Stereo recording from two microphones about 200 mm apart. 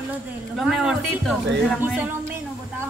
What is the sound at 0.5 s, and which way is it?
A man's voice, centre (ahead or behind).